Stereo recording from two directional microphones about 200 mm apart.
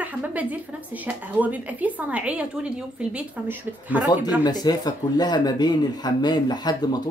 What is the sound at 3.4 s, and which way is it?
Speech, 10° right (ahead or behind).